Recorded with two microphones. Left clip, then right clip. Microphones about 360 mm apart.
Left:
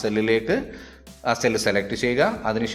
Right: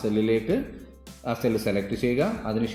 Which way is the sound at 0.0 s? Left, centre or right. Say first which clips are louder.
Left 3 dB; left.